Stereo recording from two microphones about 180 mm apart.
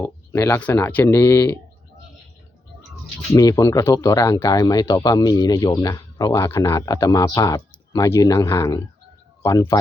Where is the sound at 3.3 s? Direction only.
20° left (ahead or behind).